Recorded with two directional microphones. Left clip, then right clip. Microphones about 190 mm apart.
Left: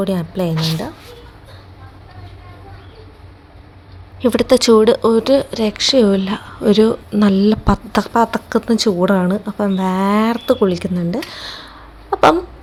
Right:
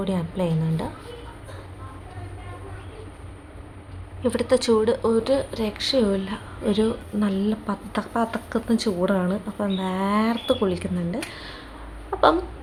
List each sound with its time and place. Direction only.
0.0 s speech: 30° left (ahead or behind)
4.2 s speech: 45° left (ahead or behind)